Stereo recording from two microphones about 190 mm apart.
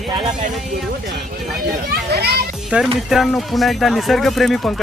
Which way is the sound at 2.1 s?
55° right (ahead or behind).